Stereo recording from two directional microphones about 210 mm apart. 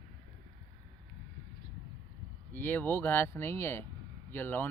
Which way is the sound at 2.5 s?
10° left (ahead or behind).